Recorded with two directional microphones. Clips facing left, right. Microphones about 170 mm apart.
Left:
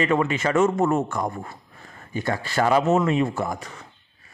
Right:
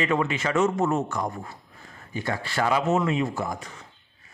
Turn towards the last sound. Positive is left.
turn(degrees=45)  # may be behind; listen again after turning